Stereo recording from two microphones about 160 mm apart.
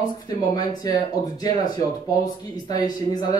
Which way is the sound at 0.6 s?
25° left (ahead or behind).